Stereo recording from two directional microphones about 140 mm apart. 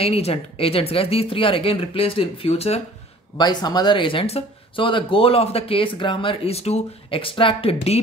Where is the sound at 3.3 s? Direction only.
30° left (ahead or behind).